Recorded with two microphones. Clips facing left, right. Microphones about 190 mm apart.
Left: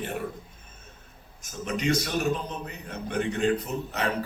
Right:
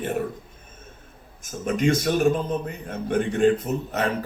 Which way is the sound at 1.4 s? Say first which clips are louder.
Right 6 dB; 50° right (ahead or behind).